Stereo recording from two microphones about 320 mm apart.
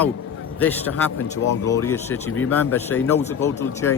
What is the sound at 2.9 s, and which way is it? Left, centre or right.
Speech, left.